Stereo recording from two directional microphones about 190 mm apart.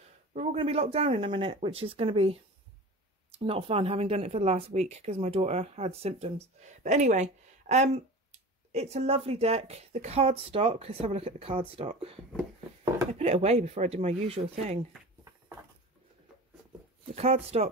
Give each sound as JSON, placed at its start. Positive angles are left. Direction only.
{"t": 0.3, "sound": "speech", "side_deg": -35}
{"t": 13.2, "sound": "speech", "side_deg": -35}
{"t": 17.1, "sound": "speech", "side_deg": -30}